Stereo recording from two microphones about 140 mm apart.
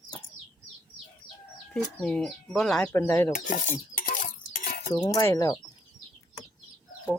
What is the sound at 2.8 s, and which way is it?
Speech, 20° left (ahead or behind).